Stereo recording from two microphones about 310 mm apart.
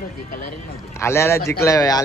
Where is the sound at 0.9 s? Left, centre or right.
Centre.